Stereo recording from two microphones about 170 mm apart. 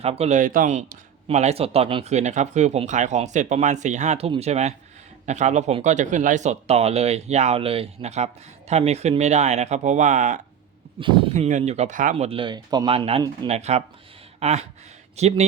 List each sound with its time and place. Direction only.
0.0 s speech: 35° right (ahead or behind)
11.0 s speech: 30° right (ahead or behind)
11.3 s speech: 40° right (ahead or behind)
12.1 s speech: 35° right (ahead or behind)
13.5 s speech: 40° right (ahead or behind)
14.3 s a sound: 40° right (ahead or behind)
15.1 s speech: 40° right (ahead or behind)